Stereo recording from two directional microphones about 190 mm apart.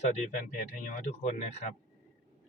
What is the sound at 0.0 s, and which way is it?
Speech, 40° left (ahead or behind).